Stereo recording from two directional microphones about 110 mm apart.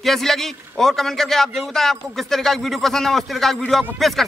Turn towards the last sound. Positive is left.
turn(degrees=0)  # may be behind; listen again after turning